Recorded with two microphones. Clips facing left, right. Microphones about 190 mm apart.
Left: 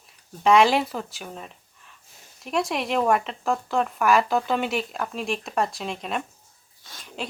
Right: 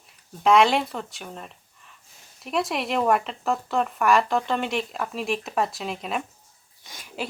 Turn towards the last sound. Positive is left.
turn(degrees=-15)  # may be behind; listen again after turning